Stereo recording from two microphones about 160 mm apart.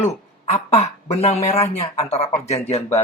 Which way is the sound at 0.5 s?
45° left (ahead or behind).